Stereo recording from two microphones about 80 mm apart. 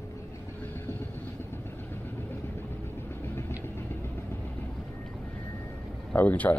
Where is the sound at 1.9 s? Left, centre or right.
Left.